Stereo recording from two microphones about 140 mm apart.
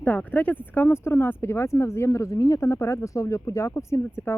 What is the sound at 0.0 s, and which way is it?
Speech, 10° left (ahead or behind).